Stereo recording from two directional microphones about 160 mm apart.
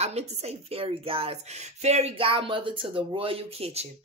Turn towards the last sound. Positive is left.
turn(degrees=-40)  # may be behind; listen again after turning